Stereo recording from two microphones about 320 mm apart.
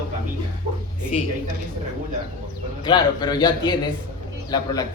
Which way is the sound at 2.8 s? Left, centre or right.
Centre.